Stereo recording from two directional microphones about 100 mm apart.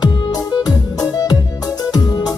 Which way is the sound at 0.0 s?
40° left (ahead or behind).